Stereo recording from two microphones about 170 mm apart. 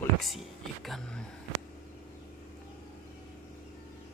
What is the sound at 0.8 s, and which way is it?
Speech, centre (ahead or behind).